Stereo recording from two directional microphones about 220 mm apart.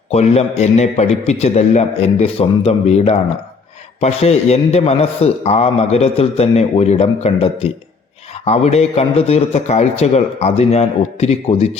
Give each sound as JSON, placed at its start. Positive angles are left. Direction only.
{"t": 0.1, "sound": "a man's voice", "side_deg": 30}